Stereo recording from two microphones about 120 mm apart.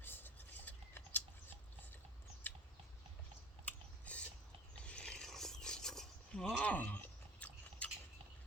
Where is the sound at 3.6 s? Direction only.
10° left (ahead or behind).